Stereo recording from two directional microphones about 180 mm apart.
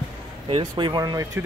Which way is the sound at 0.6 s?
25° right (ahead or behind).